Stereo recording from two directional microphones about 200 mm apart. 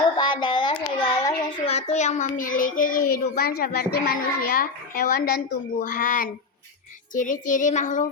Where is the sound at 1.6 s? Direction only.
35° left (ahead or behind).